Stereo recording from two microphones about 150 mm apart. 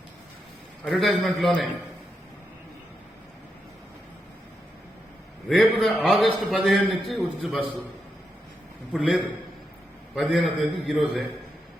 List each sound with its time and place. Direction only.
0.9 s a man's voice: centre (ahead or behind)
5.5 s a man's voice: centre (ahead or behind)
8.9 s a man's voice: centre (ahead or behind)